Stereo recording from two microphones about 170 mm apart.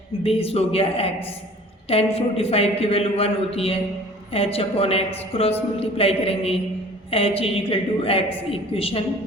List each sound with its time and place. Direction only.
0.2 s a man's voice: 35° left (ahead or behind)